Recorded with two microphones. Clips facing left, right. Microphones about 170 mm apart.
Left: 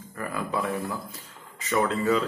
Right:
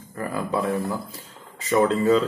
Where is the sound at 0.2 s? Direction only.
30° right (ahead or behind).